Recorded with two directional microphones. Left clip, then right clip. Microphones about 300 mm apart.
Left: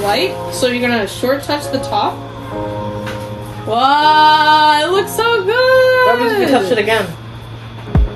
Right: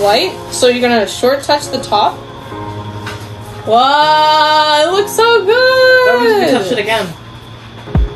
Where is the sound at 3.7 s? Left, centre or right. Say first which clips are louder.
Right 2 dB; centre.